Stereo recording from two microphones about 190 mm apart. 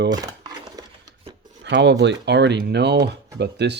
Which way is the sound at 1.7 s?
65° right (ahead or behind).